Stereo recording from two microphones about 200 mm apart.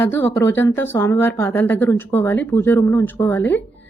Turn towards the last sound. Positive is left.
turn(degrees=10)  # may be behind; listen again after turning